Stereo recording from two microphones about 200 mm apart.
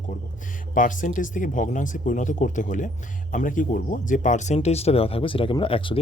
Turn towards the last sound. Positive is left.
turn(degrees=25)  # may be behind; listen again after turning